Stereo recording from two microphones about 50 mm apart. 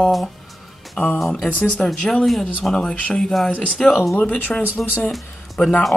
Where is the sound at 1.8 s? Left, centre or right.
Left.